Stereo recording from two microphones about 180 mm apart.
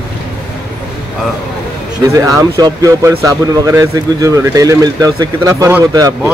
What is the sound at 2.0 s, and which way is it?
Speech, 15° right (ahead or behind).